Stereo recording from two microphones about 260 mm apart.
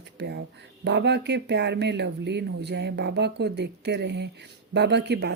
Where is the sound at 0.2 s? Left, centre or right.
Right.